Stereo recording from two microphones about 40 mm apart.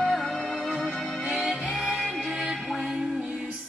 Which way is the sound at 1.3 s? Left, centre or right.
Centre.